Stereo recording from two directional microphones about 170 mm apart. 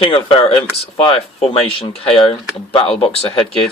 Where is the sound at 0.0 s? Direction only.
35° left (ahead or behind).